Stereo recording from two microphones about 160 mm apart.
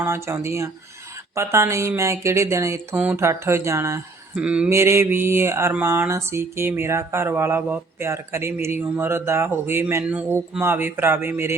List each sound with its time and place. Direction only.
0.0 s mantra: 15° right (ahead or behind)
4.4 s mantra: 5° right (ahead or behind)
4.7 s mantra: 15° right (ahead or behind)